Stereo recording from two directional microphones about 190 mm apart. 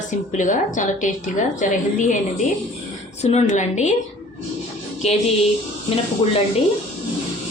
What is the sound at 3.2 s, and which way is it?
Speech, 35° left (ahead or behind).